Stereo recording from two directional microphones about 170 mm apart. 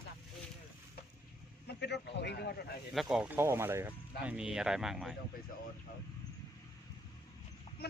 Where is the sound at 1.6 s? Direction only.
80° left.